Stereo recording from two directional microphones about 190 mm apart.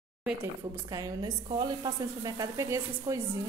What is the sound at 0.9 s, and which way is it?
A woman's voice, 20° right (ahead or behind).